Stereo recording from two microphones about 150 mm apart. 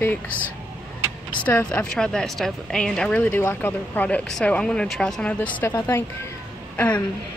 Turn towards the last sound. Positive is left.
turn(degrees=10)  # may be behind; listen again after turning